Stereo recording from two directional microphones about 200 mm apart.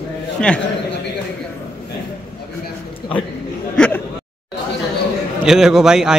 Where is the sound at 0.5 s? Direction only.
5° left (ahead or behind).